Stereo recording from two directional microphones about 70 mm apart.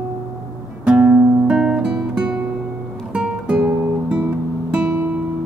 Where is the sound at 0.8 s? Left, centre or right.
Centre.